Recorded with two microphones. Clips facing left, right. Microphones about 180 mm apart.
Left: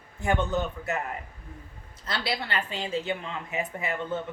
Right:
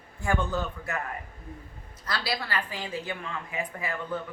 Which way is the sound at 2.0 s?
25° left (ahead or behind).